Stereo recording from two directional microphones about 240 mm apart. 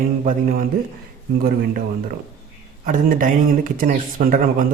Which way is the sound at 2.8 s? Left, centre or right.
Right.